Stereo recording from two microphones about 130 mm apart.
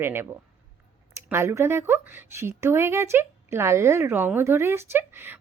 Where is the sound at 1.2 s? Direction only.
20° right (ahead or behind).